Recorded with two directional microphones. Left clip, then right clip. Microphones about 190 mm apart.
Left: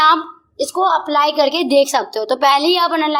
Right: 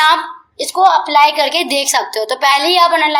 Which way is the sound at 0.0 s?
50° left (ahead or behind).